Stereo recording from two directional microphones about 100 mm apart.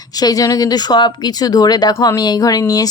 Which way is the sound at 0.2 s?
40° left (ahead or behind).